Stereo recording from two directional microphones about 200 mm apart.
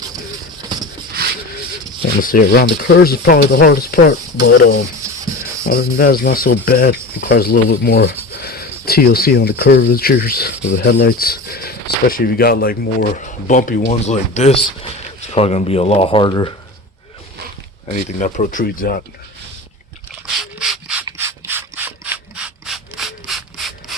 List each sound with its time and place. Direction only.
2.1 s speech: 45° left (ahead or behind)
5.0 s sanding: 15° right (ahead or behind)
5.6 s speech: 45° left (ahead or behind); by 16.5 s 25° left (ahead or behind)
17.8 s speech: 35° left (ahead or behind)
20.4 s rub: 5° right (ahead or behind)
21.2 s ratchet: 10° right (ahead or behind)